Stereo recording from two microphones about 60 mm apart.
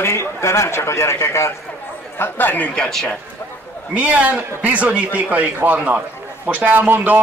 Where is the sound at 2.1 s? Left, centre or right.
Left.